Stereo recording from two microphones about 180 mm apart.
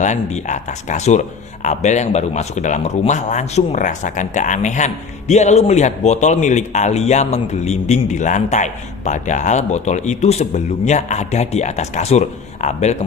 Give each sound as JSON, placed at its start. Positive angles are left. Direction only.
{"t": 0.0, "sound": "speech", "side_deg": 40}